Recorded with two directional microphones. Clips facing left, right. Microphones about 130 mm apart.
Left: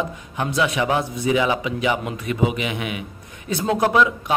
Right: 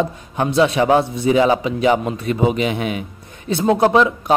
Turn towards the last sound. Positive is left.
turn(degrees=-30)  # may be behind; listen again after turning